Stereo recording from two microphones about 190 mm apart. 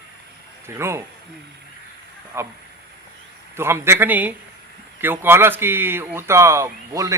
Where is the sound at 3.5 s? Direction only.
15° right (ahead or behind).